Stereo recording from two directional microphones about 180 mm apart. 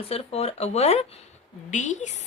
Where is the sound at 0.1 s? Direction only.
35° left (ahead or behind).